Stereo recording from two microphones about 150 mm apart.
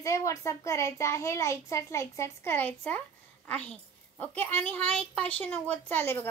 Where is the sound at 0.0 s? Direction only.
20° left (ahead or behind).